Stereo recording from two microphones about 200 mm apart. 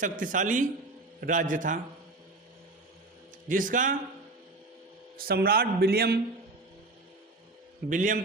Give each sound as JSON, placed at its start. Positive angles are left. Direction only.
{"t": 0.0, "sound": "a man's voice", "side_deg": -40}
{"t": 3.5, "sound": "a man's voice", "side_deg": -40}
{"t": 5.1, "sound": "a man's voice", "side_deg": -50}
{"t": 7.9, "sound": "a man's voice", "side_deg": -40}